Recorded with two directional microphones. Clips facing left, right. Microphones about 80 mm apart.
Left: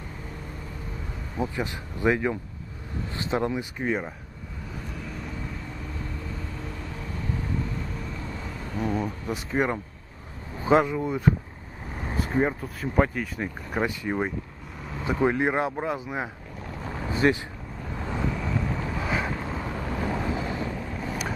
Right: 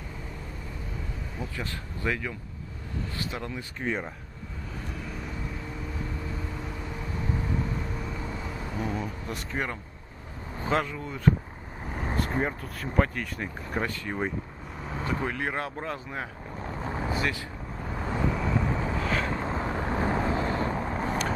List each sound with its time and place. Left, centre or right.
1.4 s speech: centre
3.8 s speech: centre
8.7 s speech: centre
9.5 s speech: centre
12.0 s speech: centre
16.7 s boat: right
17.2 s speech: left
18.1 s vehicle: centre
18.9 s vehicle: centre
19.3 s vehicle: right
20.5 s vehicle: right